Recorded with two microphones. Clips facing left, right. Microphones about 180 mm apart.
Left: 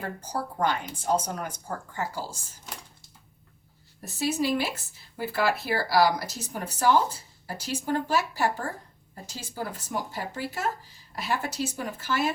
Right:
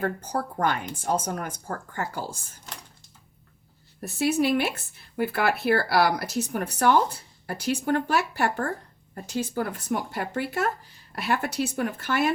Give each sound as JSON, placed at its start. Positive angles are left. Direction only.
{"t": 0.0, "sound": "speech", "side_deg": -60}
{"t": 4.0, "sound": "speech", "side_deg": -60}